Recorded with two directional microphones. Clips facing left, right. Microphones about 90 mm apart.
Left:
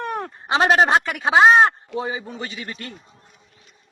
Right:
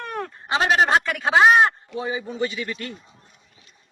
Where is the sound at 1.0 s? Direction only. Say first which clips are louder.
Left 2 dB; 15° left (ahead or behind); by 2.9 s 35° left (ahead or behind).